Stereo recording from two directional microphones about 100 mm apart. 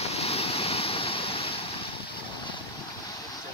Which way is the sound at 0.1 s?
90° left.